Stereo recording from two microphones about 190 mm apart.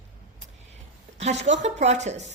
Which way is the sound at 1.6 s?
35° right (ahead or behind).